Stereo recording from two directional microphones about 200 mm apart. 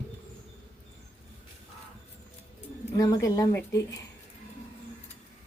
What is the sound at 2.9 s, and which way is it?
Speech, 15° left (ahead or behind).